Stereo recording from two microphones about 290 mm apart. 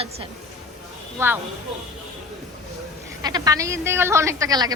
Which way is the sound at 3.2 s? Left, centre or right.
Centre.